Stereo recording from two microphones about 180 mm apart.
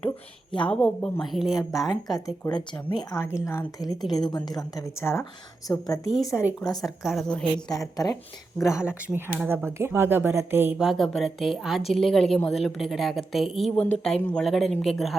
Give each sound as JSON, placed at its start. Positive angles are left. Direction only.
{"t": 0.6, "sound": "a woman's voice", "side_deg": 5}
{"t": 1.9, "sound": "speech", "side_deg": 20}
{"t": 6.8, "sound": "a woman's voice", "side_deg": 0}
{"t": 8.0, "sound": "speech", "side_deg": 20}
{"t": 8.9, "sound": "a woman's voice", "side_deg": -10}